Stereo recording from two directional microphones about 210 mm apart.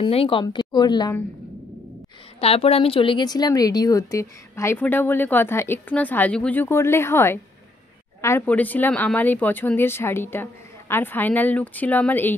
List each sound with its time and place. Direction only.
0.0 s speech: 25° left (ahead or behind)
2.4 s a woman's voice: 30° left (ahead or behind); by 12.4 s 10° left (ahead or behind)